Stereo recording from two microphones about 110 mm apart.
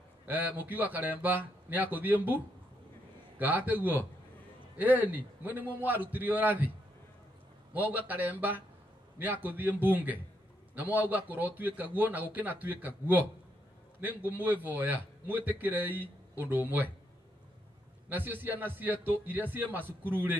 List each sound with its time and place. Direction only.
0.3 s a man's voice: 15° right (ahead or behind)
7.7 s a man's voice: 15° right (ahead or behind)
18.1 s a man's voice: 15° right (ahead or behind)